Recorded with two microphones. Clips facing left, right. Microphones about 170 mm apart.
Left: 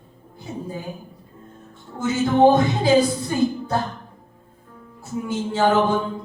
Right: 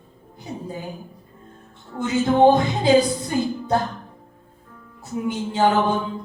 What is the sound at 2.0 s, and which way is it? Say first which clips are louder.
Speech: even; 20° right (ahead or behind).